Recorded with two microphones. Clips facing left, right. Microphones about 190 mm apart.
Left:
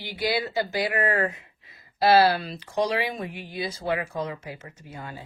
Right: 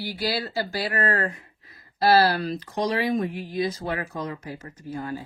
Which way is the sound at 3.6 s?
30° left (ahead or behind).